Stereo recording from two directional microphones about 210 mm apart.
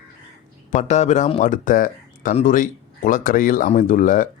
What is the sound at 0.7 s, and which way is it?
Speech, 35° left (ahead or behind).